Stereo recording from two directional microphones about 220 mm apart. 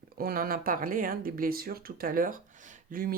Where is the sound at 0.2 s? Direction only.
40° right (ahead or behind).